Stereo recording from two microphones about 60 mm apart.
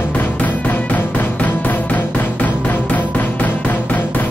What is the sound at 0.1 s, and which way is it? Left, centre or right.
Music, left.